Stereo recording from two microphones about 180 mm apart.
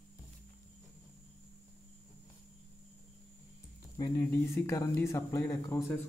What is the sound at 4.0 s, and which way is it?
A man's voice, 15° left (ahead or behind).